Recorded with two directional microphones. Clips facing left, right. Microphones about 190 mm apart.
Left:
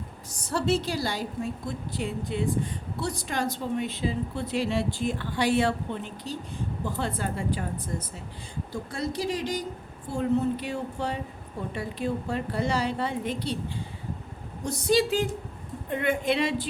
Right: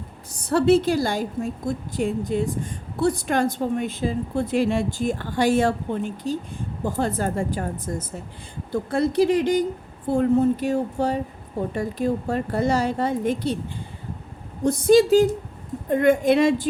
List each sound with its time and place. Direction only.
0.3 s a woman's voice: 60° right (ahead or behind)
8.7 s a woman's voice: 55° right (ahead or behind)
14.6 s a woman's voice: 50° right (ahead or behind)